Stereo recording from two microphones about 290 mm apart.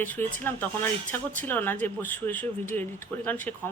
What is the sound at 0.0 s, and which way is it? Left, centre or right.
Speech, centre.